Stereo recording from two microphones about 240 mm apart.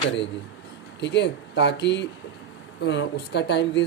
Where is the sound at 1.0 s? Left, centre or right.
Left.